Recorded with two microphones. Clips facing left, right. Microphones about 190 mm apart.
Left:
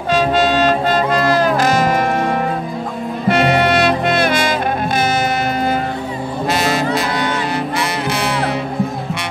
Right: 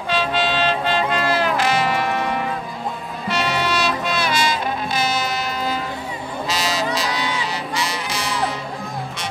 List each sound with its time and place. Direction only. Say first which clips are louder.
0.1 s music: left 7 dB; 45° left (ahead or behind); by 8.5 s 60° left (ahead or behind)